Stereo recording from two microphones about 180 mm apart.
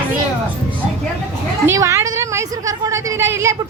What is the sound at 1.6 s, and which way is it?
A woman's voice, 15° right (ahead or behind).